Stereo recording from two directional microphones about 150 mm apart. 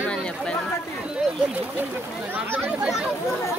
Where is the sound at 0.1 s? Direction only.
5° left (ahead or behind).